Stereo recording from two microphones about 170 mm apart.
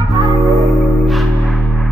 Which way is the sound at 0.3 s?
Centre (ahead or behind).